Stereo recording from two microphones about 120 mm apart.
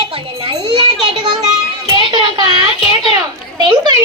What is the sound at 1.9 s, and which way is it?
A child's voice, 45° right (ahead or behind).